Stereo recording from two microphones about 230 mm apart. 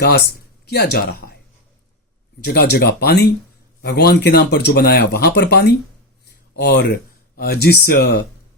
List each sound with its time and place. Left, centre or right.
0.6 s speech: left
2.4 s speech: left